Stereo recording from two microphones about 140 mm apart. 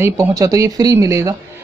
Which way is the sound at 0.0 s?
25° right (ahead or behind).